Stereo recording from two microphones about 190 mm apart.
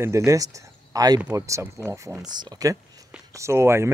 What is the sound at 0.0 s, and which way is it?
Speech, 15° right (ahead or behind).